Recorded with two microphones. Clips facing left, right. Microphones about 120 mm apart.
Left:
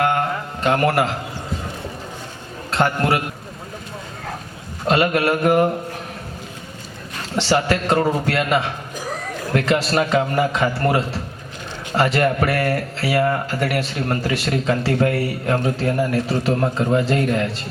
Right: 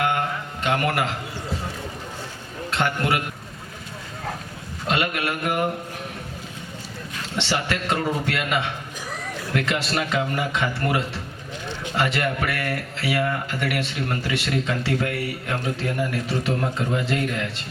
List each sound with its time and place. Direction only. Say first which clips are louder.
0.0 s carnatic music: left 4 dB; 45° left (ahead or behind)
2.6 s a man's voice: left 5 dB; 40° left (ahead or behind)
4.9 s a man's voice: left 7 dB; 40° left (ahead or behind)
7.2 s a man's voice: left 7 dB; 40° left (ahead or behind)